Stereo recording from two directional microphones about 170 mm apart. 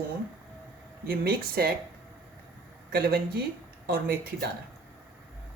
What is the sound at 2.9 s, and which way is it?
Speech, 65° right (ahead or behind).